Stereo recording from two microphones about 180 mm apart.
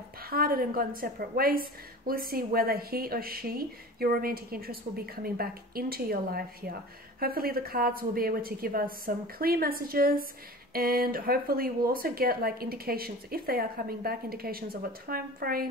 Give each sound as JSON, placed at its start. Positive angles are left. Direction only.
{"t": 0.3, "sound": "a woman's voice", "side_deg": -55}